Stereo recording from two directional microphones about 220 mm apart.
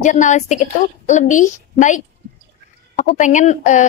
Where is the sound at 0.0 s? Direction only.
35° left (ahead or behind).